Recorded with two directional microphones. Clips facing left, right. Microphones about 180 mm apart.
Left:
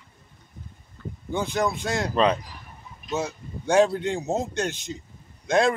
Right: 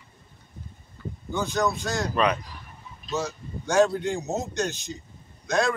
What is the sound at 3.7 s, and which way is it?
Speech, 30° left (ahead or behind).